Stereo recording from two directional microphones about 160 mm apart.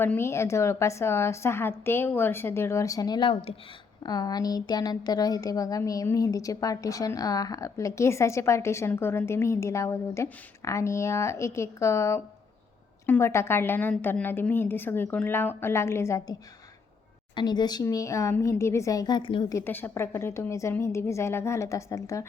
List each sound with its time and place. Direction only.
0.0 s a woman's voice: 15° left (ahead or behind)
17.3 s a woman's voice: 25° left (ahead or behind)
19.5 s a woman's voice: 10° left (ahead or behind)